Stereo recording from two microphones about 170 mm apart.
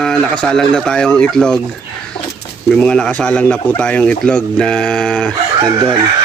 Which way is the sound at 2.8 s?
5° left (ahead or behind).